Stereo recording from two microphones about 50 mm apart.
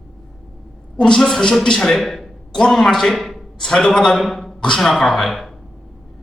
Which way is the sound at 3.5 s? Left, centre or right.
Centre.